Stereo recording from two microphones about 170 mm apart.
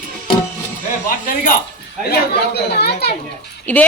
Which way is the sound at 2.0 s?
70° left (ahead or behind).